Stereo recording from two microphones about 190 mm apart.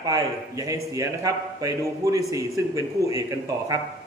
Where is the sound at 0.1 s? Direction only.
15° right (ahead or behind).